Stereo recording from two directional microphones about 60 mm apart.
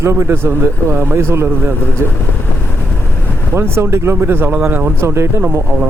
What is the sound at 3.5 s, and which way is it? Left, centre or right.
Speech, right.